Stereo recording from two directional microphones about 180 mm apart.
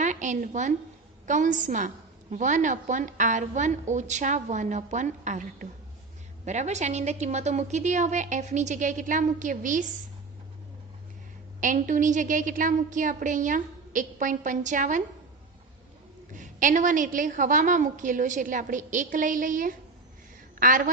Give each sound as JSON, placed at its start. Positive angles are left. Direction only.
{"t": 0.0, "sound": "a sound", "side_deg": -45}
{"t": 1.3, "sound": "a woman's voice", "side_deg": -45}
{"t": 11.6, "sound": "a woman's voice", "side_deg": -45}
{"t": 16.3, "sound": "a woman's voice", "side_deg": -45}